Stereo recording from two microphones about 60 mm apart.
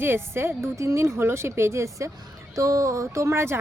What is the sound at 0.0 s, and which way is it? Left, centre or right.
Speech, right.